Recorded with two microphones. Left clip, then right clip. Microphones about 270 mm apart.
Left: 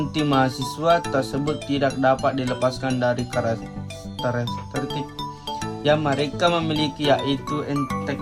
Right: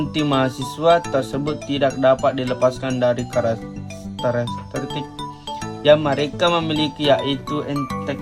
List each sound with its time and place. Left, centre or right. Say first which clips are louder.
0.0 s speech: right 1 dB; centre